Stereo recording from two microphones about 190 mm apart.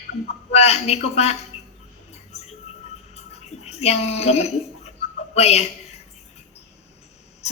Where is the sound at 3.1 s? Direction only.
35° left (ahead or behind).